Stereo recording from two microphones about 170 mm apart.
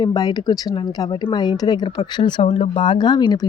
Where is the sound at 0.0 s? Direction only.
20° left (ahead or behind).